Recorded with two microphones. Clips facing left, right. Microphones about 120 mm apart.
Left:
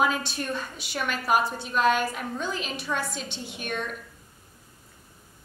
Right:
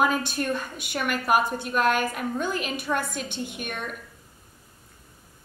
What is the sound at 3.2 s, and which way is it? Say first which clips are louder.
Speech: right 5 dB; 55° right (ahead or behind).